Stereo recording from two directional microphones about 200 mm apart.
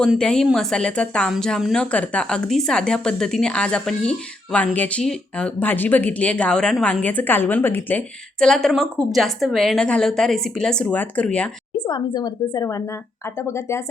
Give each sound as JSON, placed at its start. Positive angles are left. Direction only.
{"t": 0.0, "sound": "speech", "side_deg": 5}
{"t": 11.9, "sound": "a woman's voice", "side_deg": 20}